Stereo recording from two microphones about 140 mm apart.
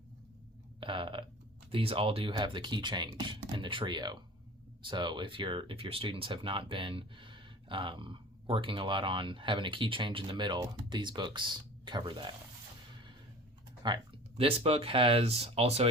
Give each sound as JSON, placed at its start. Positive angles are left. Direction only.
{"t": 0.8, "sound": "a sound", "side_deg": -35}
{"t": 1.7, "sound": "speech", "side_deg": -40}
{"t": 13.8, "sound": "speech", "side_deg": -35}